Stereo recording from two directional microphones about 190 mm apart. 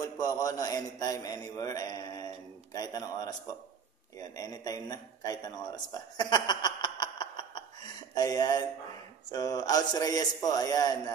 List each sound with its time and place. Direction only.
0.0 s a man's voice: 20° left (ahead or behind)